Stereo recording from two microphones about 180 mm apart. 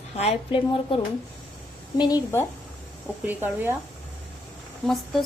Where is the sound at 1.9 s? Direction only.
20° left (ahead or behind).